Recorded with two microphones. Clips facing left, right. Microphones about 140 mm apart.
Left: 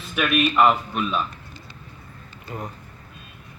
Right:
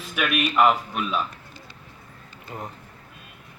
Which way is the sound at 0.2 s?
10° right (ahead or behind).